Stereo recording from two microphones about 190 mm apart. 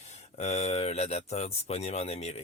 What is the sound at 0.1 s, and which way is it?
Speech, 35° left (ahead or behind).